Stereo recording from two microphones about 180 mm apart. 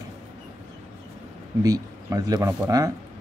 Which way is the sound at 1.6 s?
20° right (ahead or behind).